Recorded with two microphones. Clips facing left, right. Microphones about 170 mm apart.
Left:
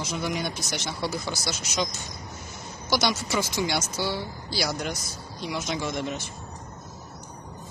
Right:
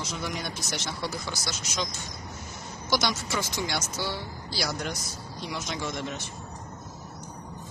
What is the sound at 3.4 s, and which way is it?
Speech, 5° left (ahead or behind).